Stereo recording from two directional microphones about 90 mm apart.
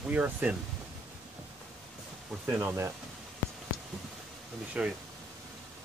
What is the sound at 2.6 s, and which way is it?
Speech, 30° right (ahead or behind).